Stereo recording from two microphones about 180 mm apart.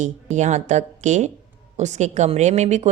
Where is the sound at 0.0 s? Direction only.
40° right (ahead or behind).